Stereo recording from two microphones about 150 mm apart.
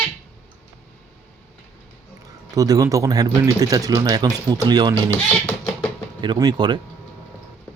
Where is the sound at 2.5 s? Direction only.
25° right (ahead or behind).